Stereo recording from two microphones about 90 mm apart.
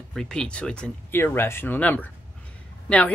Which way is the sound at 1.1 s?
25° left (ahead or behind).